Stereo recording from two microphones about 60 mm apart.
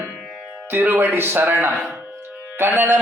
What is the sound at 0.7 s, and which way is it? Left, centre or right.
A man's voice, right.